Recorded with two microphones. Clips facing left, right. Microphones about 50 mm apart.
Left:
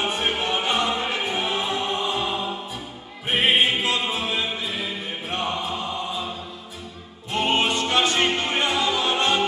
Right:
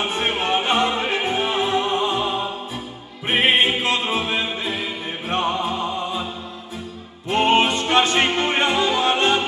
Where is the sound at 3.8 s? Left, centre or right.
Right.